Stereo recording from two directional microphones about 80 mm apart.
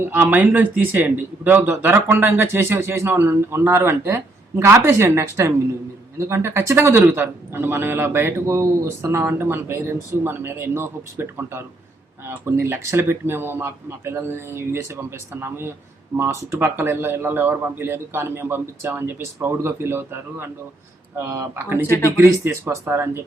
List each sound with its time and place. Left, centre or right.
0.1 s a man's voice: right
21.8 s speech: left
22.2 s speech: right